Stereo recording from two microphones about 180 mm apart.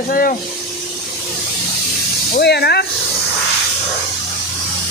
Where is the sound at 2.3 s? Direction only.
65° left (ahead or behind).